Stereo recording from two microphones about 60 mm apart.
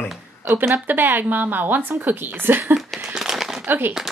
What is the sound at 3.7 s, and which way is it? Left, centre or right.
Speech, right.